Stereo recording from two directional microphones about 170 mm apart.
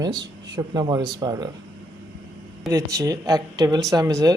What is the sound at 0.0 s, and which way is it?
Speech, 25° right (ahead or behind).